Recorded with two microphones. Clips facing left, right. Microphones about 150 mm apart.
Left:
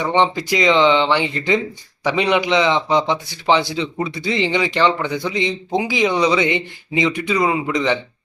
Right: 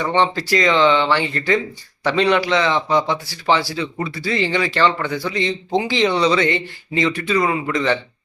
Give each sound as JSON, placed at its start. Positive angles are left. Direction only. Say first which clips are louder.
{"t": 0.0, "sound": "a man's voice", "louder": "left 1 dB", "side_deg": 15}